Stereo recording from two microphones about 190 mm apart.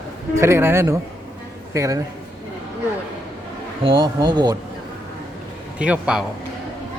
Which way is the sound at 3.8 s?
25° right (ahead or behind).